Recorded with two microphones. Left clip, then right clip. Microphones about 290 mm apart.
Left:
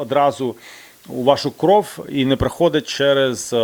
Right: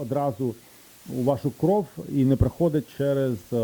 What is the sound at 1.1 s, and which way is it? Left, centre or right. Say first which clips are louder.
Speech: left 5 dB; left.